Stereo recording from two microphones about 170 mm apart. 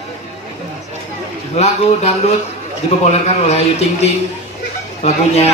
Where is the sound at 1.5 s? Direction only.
40° left (ahead or behind).